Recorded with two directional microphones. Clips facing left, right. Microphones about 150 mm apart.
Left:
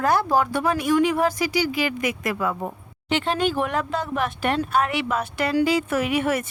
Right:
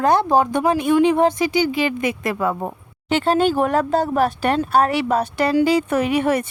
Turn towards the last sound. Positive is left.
turn(degrees=-30)  # may be behind; listen again after turning